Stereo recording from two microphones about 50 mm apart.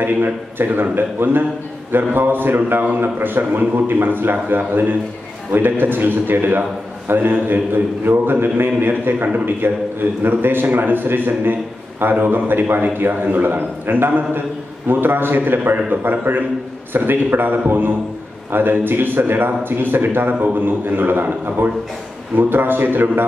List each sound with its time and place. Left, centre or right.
0.0 s a man's voice: right
22.4 s a man's voice: right